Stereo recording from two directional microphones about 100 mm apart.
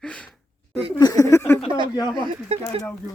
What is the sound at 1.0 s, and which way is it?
Speech, 40° left (ahead or behind).